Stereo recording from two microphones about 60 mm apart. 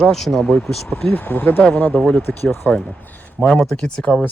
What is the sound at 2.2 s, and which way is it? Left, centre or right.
Speech, left.